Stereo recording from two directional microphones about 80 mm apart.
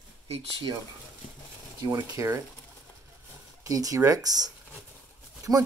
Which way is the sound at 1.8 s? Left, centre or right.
Right.